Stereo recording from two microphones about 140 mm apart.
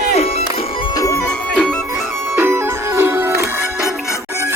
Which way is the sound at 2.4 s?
15° right (ahead or behind).